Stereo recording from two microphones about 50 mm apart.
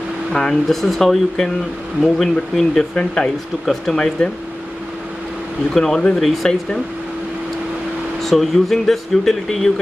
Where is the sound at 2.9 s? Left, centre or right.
Centre.